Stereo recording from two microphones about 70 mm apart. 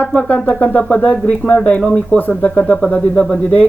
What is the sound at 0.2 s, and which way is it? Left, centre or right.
A man's voice, centre.